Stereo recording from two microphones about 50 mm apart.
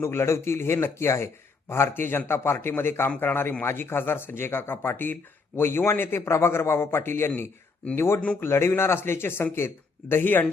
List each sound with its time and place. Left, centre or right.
0.0 s a man's voice: left
3.6 s a man's voice: left